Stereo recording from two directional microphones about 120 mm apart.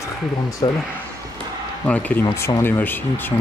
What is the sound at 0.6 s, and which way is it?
Speech, 40° left (ahead or behind).